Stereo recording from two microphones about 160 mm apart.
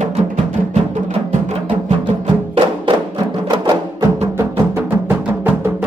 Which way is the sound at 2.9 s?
30° right (ahead or behind).